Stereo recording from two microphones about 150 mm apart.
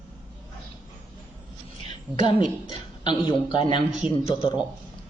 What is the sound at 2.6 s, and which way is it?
A man's voice, 30° left (ahead or behind).